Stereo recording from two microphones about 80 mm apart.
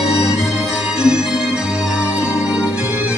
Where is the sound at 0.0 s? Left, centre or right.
Centre.